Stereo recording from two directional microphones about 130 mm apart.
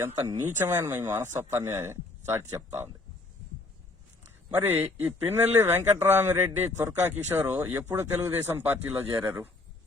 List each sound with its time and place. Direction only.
0.6 s speech: 20° right (ahead or behind)
4.5 s speech: 15° right (ahead or behind)